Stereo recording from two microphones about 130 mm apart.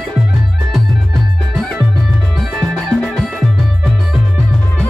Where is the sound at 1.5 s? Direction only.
Centre (ahead or behind).